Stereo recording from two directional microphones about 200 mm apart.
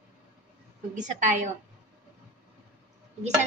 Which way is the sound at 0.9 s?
40° right (ahead or behind).